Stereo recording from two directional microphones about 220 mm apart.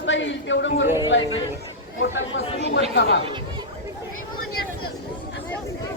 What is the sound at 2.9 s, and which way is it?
Speech, 50° left (ahead or behind).